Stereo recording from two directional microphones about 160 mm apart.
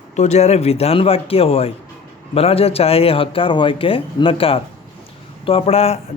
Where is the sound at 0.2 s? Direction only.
45° left (ahead or behind).